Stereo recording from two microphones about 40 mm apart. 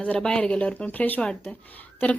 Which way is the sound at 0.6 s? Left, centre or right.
Left.